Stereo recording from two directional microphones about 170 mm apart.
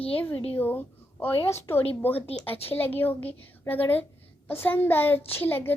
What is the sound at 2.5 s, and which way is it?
Speech, 35° left (ahead or behind).